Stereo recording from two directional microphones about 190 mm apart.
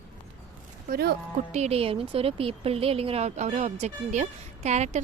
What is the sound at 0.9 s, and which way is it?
Speech, 55° right (ahead or behind).